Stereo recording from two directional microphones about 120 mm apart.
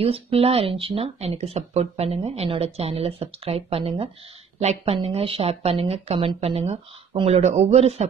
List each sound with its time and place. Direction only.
0.0 s speech: 55° right (ahead or behind)